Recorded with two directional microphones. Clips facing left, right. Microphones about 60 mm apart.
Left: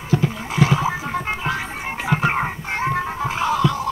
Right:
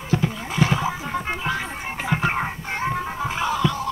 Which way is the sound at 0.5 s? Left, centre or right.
Centre.